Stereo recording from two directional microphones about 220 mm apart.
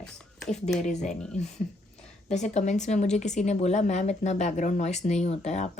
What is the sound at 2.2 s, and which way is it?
Speech, 30° left (ahead or behind).